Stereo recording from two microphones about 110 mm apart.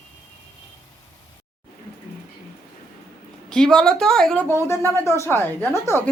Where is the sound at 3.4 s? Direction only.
5° left (ahead or behind).